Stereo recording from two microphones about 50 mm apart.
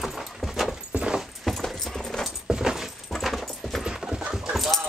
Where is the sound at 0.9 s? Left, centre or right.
Right.